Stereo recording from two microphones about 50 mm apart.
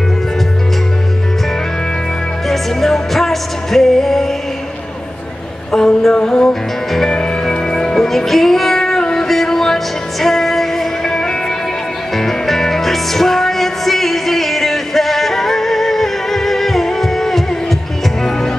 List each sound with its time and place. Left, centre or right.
2.4 s music: centre
5.7 s a sound: centre
6.1 s music: centre